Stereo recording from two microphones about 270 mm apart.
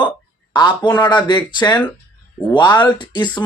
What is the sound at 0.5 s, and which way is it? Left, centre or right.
Speech, centre.